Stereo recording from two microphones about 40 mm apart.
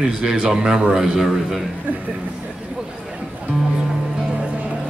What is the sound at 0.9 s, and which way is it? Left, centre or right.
Speech, centre.